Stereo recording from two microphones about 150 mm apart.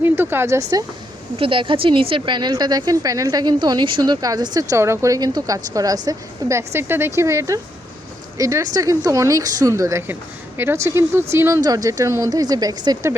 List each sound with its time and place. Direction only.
0.0 s speech: 15° right (ahead or behind)
1.4 s a woman's voice: 35° right (ahead or behind)